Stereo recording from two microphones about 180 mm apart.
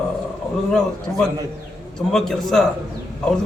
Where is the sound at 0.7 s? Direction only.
5° left (ahead or behind).